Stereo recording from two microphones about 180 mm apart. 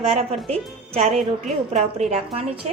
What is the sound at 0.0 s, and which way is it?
Speech, 35° right (ahead or behind).